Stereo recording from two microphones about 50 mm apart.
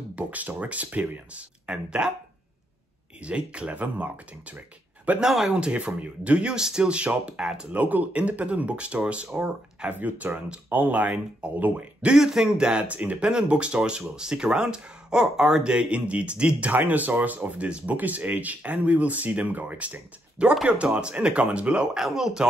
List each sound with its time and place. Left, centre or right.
0.1 s speech: right
1.7 s a man's voice: centre
3.2 s speech: right
5.2 s speech: centre
5.5 s a man's voice: right
7.7 s speech: right; by 9.8 s centre
9.8 s speech: right
12.1 s speech: centre
21.9 s a man's voice: centre